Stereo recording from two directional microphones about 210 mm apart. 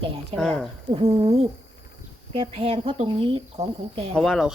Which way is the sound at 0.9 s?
25° right (ahead or behind).